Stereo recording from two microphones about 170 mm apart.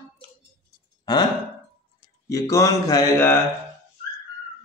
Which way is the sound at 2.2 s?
20° left (ahead or behind).